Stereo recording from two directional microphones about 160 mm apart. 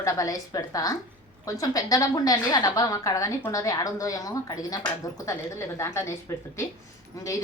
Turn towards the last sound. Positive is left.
turn(degrees=20)  # may be behind; listen again after turning